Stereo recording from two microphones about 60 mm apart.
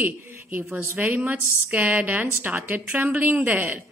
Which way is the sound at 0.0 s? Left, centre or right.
Right.